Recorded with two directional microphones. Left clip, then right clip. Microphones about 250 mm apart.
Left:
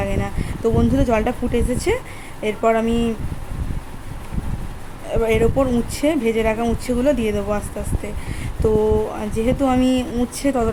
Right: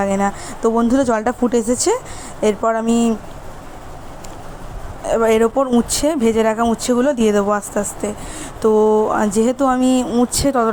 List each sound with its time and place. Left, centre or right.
0.0 s speech: centre
5.0 s speech: centre
8.6 s speech: centre
10.1 s speech: right
10.3 s speech: centre